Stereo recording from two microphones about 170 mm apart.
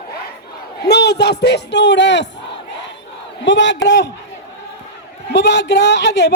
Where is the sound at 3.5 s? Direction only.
90° left.